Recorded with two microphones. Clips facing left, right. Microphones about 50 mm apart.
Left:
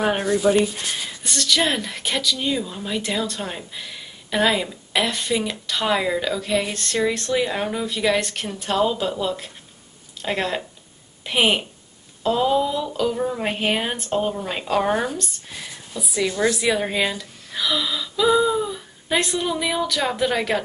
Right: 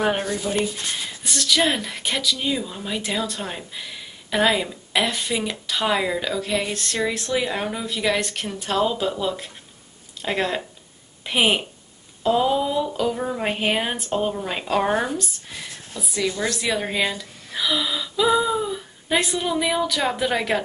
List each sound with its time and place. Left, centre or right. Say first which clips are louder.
0.5 s speech: left 8 dB; left
1.2 s speech: even; centre